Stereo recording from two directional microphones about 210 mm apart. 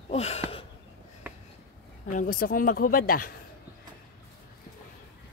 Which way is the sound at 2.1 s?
40° left (ahead or behind).